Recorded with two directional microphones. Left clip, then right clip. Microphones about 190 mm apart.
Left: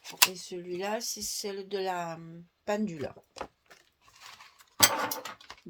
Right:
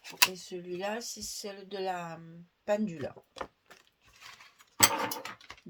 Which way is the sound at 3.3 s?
5° left (ahead or behind).